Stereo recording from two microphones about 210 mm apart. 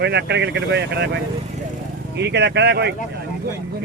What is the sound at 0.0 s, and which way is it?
Speech, 55° right (ahead or behind).